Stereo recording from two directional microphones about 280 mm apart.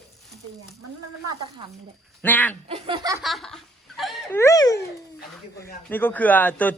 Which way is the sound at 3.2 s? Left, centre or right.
Centre.